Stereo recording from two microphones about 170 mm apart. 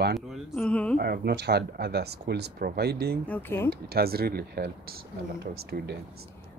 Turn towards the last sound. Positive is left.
turn(degrees=-75)  # may be behind; listen again after turning